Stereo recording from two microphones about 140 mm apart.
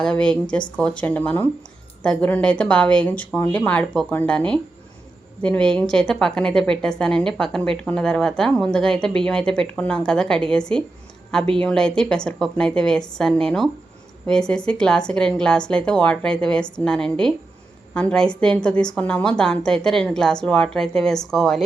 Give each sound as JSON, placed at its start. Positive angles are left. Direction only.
{"t": 0.0, "sound": "speech", "side_deg": 5}